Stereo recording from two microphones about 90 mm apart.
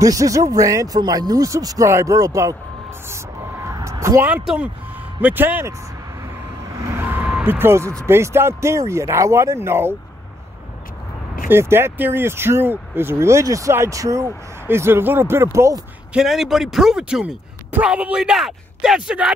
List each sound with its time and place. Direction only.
0.0 s speech: 40° right (ahead or behind)
3.1 s a sound: 30° right (ahead or behind)
4.0 s speech: 30° right (ahead or behind)
5.2 s speech: 20° right (ahead or behind)
6.9 s vehicle: 25° right (ahead or behind)
7.4 s speech: 25° right (ahead or behind)
11.4 s speech: 25° right (ahead or behind)
16.1 s speech: 5° right (ahead or behind)